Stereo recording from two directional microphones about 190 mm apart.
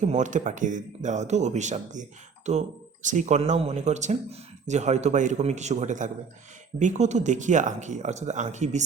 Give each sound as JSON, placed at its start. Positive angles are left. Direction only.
{"t": 0.0, "sound": "speech", "side_deg": -40}